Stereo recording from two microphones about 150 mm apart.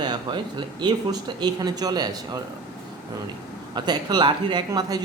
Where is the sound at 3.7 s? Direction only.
30° right (ahead or behind).